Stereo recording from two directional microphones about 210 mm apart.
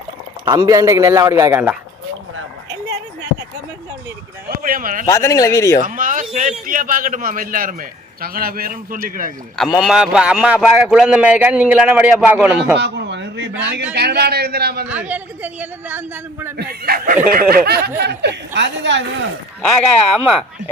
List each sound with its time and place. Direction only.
0.4 s a man's voice: 20° right (ahead or behind)
4.6 s a man's voice: 40° right (ahead or behind)
5.0 s speech: 15° left (ahead or behind)
5.8 s a sound: 40° right (ahead or behind)
6.7 s a man's voice: 40° right (ahead or behind)
9.8 s speech: 5° right (ahead or behind)
12.8 s a sound: 55° right (ahead or behind)
13.9 s speech: 50° right (ahead or behind)
14.8 s a man's voice: 5° right (ahead or behind)
16.6 s speech: 45° right (ahead or behind)